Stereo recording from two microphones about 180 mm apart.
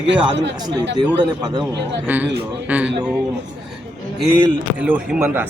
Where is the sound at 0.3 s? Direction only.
75° right (ahead or behind).